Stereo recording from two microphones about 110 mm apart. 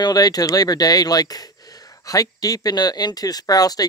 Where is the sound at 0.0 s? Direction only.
35° left (ahead or behind).